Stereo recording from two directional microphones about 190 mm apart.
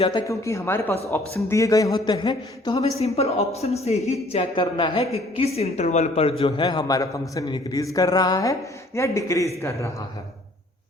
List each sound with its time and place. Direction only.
0.1 s a woman's voice: 20° left (ahead or behind)